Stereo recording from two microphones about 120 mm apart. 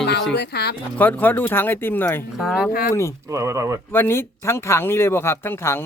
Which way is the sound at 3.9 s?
20° left (ahead or behind).